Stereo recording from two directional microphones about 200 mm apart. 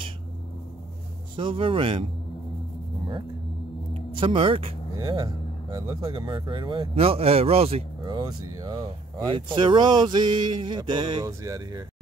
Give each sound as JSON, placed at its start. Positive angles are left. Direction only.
{"t": 1.3, "sound": "speech", "side_deg": -25}
{"t": 3.9, "sound": "speech", "side_deg": -25}